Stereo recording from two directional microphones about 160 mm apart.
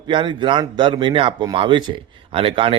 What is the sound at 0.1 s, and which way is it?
A man's voice, 30° right (ahead or behind).